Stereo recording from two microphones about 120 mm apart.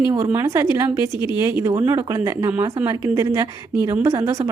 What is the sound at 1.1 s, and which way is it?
Speech, 40° left (ahead or behind).